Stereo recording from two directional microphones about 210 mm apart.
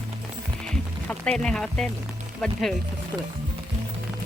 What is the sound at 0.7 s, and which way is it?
Music, 5° left (ahead or behind).